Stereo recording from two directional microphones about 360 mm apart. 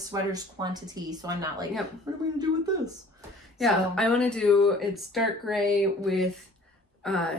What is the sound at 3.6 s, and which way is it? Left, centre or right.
Speech, centre.